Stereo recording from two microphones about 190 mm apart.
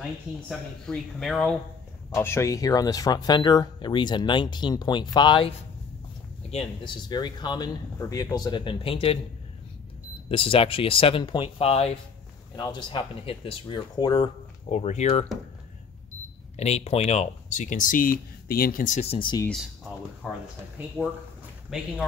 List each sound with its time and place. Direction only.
0.5 s a man's voice: centre (ahead or behind)
2.1 s speech: 15° left (ahead or behind)
6.5 s speech: 30° left (ahead or behind)
10.3 s speech: 30° left (ahead or behind)
12.5 s speech: 20° left (ahead or behind)
14.7 s speech: 35° left (ahead or behind)
16.5 s speech: 35° left (ahead or behind)
20.2 s a man's voice: centre (ahead or behind)
21.6 s a man's voice: centre (ahead or behind)